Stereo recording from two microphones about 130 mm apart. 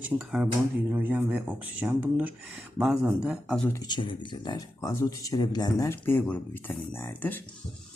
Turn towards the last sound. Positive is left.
turn(degrees=15)  # may be behind; listen again after turning